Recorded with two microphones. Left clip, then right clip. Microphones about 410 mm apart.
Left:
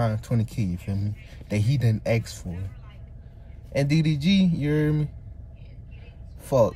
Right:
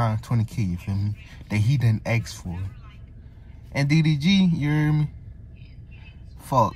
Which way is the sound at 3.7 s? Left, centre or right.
Centre.